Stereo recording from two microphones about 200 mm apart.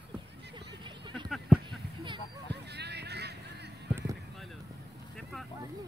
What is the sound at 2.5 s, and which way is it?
Vehicle, 55° right (ahead or behind).